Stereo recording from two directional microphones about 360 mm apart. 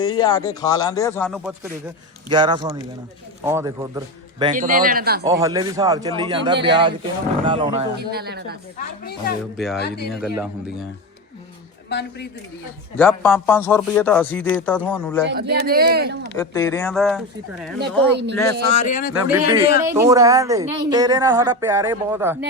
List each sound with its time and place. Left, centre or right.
0.0 s a man's voice: centre
2.3 s a woman's voice: centre
5.2 s a woman's voice: centre
7.9 s a man's voice: right
9.4 s speech: centre
9.7 s speech: left
10.1 s speech: centre
11.9 s speech: left
13.0 s speech: centre
15.3 s a man's voice: right
16.4 s speech: centre
17.7 s a man's voice: right
18.9 s speech: left
19.3 s a woman's voice: centre